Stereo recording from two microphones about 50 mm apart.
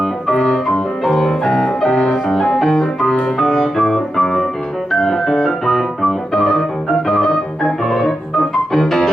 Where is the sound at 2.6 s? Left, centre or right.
Centre.